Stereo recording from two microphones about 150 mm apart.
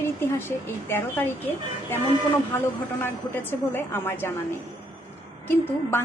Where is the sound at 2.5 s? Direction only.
15° left (ahead or behind).